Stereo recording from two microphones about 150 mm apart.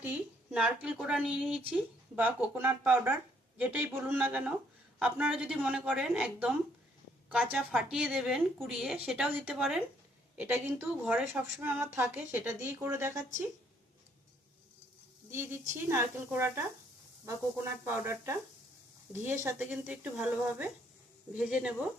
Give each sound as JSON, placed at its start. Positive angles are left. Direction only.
{"t": 0.0, "sound": "a woman's voice", "side_deg": -10}
{"t": 7.5, "sound": "a woman's voice", "side_deg": -5}
{"t": 11.0, "sound": "a woman's voice", "side_deg": 0}
{"t": 11.6, "sound": "a woman's voice", "side_deg": -15}
{"t": 15.3, "sound": "a woman's voice", "side_deg": -15}